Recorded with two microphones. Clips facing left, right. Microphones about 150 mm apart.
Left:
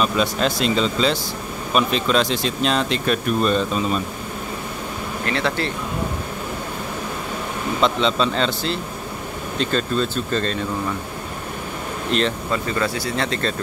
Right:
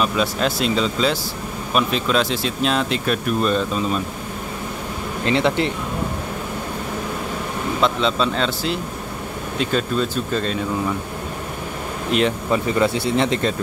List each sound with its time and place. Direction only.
0.0 s speech: 5° right (ahead or behind)
5.2 s speech: 20° right (ahead or behind)
7.8 s speech: centre (ahead or behind)
12.1 s speech: 10° right (ahead or behind)